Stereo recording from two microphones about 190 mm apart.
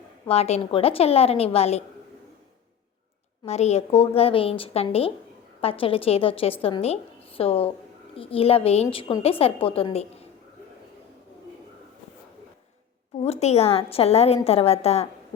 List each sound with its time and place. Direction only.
0.3 s a woman's voice: 35° left (ahead or behind)
3.4 s a woman's voice: 35° left (ahead or behind)
13.1 s a woman's voice: 35° left (ahead or behind)